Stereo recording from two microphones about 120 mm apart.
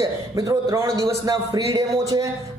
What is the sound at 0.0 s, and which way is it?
A man's voice, 30° right (ahead or behind).